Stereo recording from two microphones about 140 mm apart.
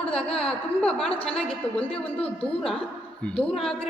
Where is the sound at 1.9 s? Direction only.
40° left (ahead or behind).